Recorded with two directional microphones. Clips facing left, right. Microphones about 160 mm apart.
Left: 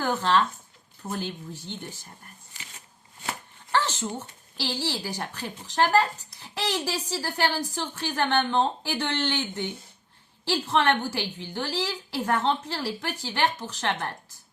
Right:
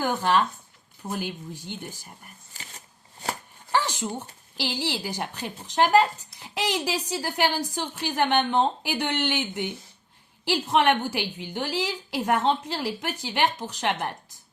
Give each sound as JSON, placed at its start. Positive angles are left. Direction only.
{"t": 0.0, "sound": "a woman's voice", "side_deg": -15}
{"t": 3.7, "sound": "a woman's voice", "side_deg": -15}